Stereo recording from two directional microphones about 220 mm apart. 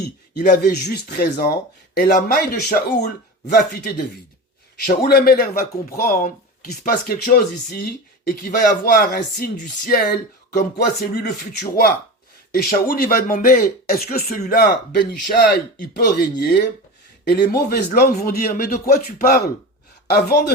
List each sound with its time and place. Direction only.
0.3 s speech: 45° left (ahead or behind)
11.1 s speech: 45° left (ahead or behind)
17.7 s speech: 45° left (ahead or behind)